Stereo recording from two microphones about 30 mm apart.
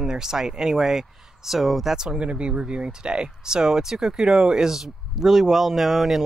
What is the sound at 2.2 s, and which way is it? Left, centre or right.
Speech, right.